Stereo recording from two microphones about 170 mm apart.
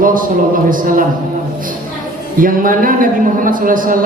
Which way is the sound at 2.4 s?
55° right (ahead or behind).